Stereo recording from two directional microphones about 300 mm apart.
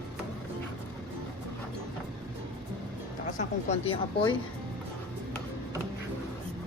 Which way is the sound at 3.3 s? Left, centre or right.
Left.